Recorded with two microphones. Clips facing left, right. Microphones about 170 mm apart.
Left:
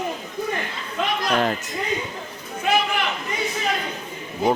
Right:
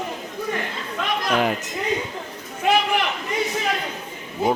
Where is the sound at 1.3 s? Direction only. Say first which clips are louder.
Right 1 dB; 10° right (ahead or behind).